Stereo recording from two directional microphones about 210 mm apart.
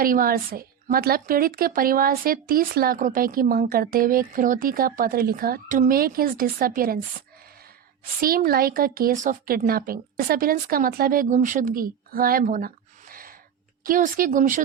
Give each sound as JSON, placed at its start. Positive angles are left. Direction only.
{"t": 0.0, "sound": "a woman's voice", "side_deg": -45}
{"t": 8.2, "sound": "a woman's voice", "side_deg": -45}